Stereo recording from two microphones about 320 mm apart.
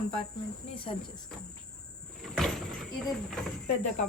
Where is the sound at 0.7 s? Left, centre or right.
Centre.